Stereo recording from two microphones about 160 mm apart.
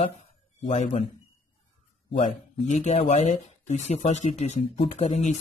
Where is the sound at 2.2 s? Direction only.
50° left (ahead or behind).